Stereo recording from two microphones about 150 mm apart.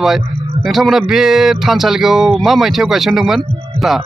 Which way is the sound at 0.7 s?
Centre (ahead or behind).